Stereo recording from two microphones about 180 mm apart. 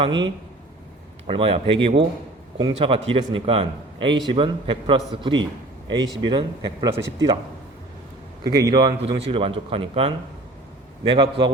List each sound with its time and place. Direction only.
0.0 s speech: 25° right (ahead or behind)
8.4 s speech: 20° right (ahead or behind)